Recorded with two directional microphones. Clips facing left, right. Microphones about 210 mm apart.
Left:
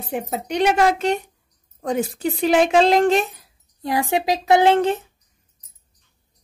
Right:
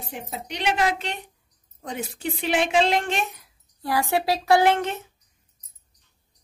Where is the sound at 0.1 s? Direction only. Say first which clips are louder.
Left 11 dB; 50° left (ahead or behind).